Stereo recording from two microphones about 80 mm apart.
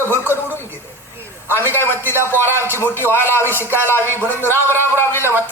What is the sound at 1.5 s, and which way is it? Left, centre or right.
A man's voice, left.